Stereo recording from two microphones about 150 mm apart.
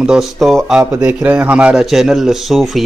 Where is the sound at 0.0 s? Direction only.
5° right (ahead or behind).